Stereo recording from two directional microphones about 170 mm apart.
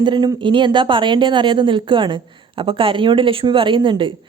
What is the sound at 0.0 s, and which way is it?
Speech, 25° right (ahead or behind).